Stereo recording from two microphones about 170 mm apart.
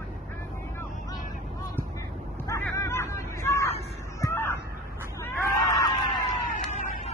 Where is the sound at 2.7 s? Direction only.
15° left (ahead or behind).